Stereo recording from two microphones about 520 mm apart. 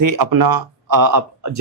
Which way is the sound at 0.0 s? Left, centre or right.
Right.